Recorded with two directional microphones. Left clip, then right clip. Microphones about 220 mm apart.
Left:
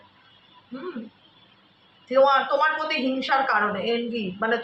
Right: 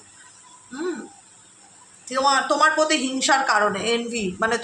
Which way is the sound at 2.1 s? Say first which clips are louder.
Left 1 dB; 55° right (ahead or behind).